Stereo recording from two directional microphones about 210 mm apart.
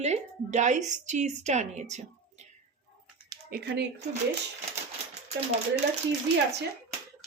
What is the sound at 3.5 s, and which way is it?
Speech, 45° right (ahead or behind).